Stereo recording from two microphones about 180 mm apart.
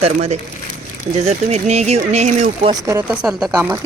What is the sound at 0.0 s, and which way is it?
Speech, 40° right (ahead or behind).